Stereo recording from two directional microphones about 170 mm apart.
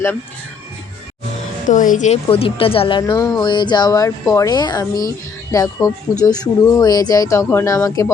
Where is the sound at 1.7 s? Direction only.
50° left (ahead or behind).